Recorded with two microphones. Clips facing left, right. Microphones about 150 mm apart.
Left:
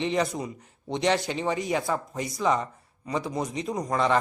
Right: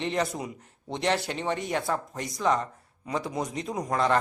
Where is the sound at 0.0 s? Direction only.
Centre (ahead or behind).